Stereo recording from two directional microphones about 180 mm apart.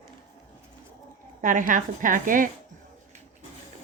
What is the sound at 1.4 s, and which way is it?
Speech, 45° right (ahead or behind).